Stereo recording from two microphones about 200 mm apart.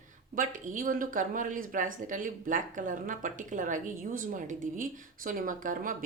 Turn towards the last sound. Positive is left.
turn(degrees=-40)  # may be behind; listen again after turning